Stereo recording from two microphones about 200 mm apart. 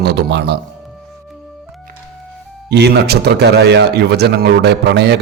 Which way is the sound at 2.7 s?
55° right (ahead or behind).